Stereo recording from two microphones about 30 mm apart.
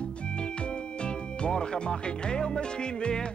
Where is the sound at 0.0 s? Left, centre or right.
Left.